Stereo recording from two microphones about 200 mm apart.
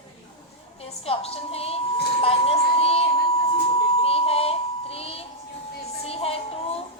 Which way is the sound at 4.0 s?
30° left (ahead or behind).